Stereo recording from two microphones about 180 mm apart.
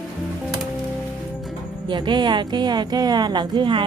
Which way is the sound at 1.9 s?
25° right (ahead or behind).